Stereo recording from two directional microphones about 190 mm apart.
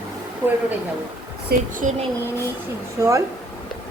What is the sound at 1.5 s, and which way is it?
Speech, 45° right (ahead or behind).